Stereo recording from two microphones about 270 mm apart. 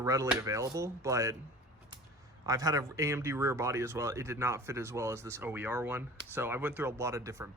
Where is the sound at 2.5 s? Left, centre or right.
Centre.